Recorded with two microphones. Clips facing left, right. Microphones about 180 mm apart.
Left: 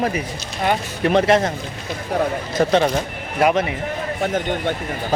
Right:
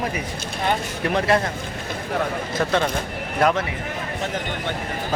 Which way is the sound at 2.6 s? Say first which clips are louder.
Left 6 dB; 30° left (ahead or behind).